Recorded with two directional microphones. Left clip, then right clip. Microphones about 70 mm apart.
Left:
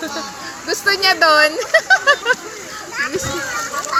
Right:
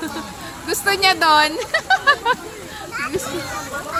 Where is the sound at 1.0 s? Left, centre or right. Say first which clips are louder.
Left 2 dB; left.